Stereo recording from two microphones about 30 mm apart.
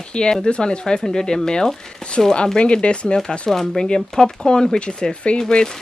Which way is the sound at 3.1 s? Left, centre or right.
Left.